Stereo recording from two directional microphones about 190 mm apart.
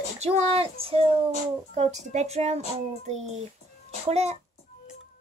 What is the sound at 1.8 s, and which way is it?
A child's voice, 35° right (ahead or behind).